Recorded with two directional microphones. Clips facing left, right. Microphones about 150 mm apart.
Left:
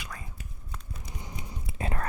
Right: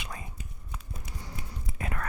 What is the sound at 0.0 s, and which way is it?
Whispering, 20° right (ahead or behind).